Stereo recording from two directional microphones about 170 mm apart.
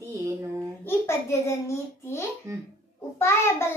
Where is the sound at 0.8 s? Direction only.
15° left (ahead or behind).